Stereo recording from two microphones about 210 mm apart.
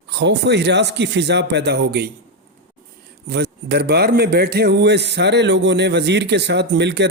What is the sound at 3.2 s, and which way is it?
A man's voice, 50° right (ahead or behind).